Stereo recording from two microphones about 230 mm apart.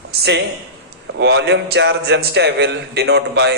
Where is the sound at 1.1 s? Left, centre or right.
Right.